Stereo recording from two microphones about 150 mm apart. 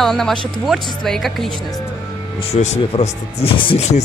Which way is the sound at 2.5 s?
45° left (ahead or behind).